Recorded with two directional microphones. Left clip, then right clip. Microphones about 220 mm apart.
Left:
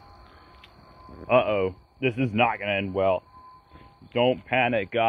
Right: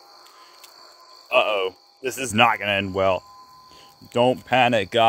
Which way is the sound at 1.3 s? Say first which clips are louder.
Right 2 dB; 45° right (ahead or behind).